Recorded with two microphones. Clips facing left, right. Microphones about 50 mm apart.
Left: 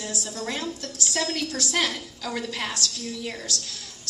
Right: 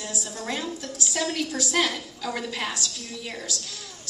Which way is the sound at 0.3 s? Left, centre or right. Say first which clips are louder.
Right 1 dB; right.